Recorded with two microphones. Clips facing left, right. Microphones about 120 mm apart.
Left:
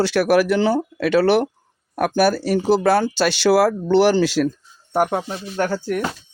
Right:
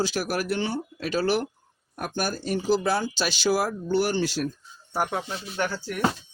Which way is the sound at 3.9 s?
90° left.